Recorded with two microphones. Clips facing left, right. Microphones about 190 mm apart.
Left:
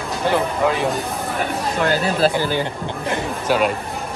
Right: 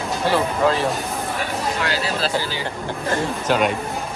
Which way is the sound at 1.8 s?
50° left (ahead or behind).